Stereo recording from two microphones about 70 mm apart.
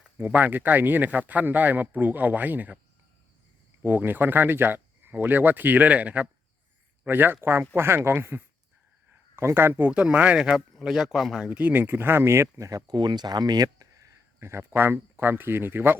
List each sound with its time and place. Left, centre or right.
0.2 s speech: right
3.8 s speech: right
9.9 s speech: centre
11.4 s speech: right
12.9 s speech: right
14.3 s speech: right